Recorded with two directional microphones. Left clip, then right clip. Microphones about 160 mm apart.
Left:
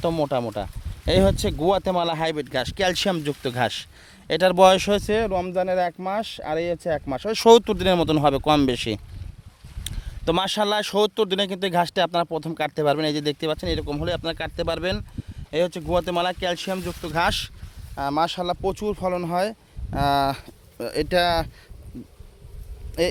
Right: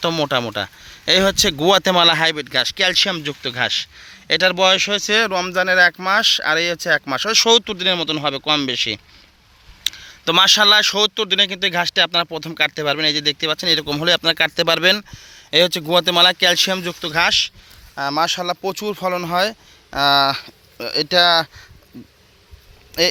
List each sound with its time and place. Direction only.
0.0 s speech: centre (ahead or behind)
1.0 s speech: 15° left (ahead or behind)
1.6 s speech: centre (ahead or behind)
2.2 s speech: 20° left (ahead or behind)
4.5 s speech: 45° left (ahead or behind)
5.1 s speech: 15° left (ahead or behind)
7.4 s speech: 45° left (ahead or behind)
9.8 s speech: 25° left (ahead or behind)
13.6 s speech: 10° left (ahead or behind)
13.8 s speech: 5° right (ahead or behind)
17.9 s speech: 10° left (ahead or behind)
22.9 s a man's voice: 10° left (ahead or behind)